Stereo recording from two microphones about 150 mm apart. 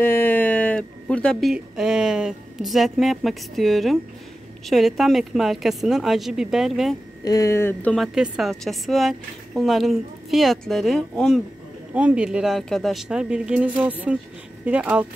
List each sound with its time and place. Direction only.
0.0 s a woman's voice: 15° left (ahead or behind); by 7.0 s centre (ahead or behind)
7.2 s speech: 20° left (ahead or behind)
7.9 s a woman's voice: centre (ahead or behind)
11.9 s a woman's voice: 10° right (ahead or behind)